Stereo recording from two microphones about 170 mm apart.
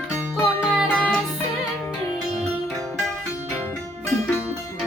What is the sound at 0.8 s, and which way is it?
Music, 5° right (ahead or behind).